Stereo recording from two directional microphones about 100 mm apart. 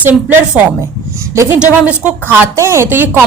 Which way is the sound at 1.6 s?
10° right (ahead or behind).